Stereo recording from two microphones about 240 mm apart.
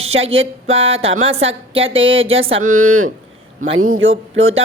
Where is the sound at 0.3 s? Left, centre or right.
Right.